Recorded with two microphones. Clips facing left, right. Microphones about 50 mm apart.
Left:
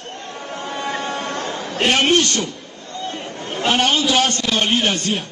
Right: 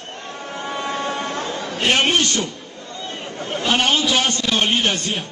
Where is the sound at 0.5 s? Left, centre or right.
Right.